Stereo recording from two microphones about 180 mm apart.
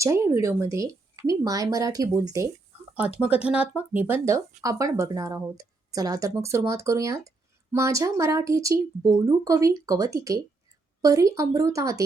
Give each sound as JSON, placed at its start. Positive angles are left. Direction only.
{"t": 0.0, "sound": "speech", "side_deg": -15}
{"t": 3.4, "sound": "speech", "side_deg": -5}